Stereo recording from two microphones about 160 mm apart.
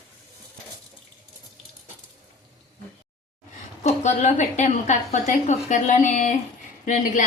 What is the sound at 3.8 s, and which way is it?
A woman's voice, 45° left (ahead or behind).